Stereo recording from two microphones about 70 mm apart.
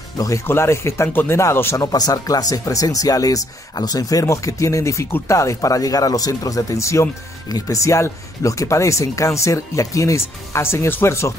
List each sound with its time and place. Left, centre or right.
0.5 s speech: left
1.8 s speech: left
7.4 s speech: left